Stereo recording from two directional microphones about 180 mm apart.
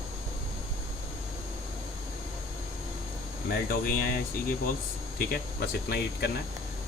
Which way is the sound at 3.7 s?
55° left (ahead or behind).